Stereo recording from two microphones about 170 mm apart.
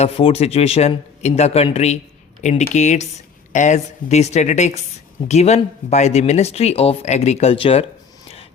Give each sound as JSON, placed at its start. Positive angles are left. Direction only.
{"t": 0.0, "sound": "a woman's voice", "side_deg": 35}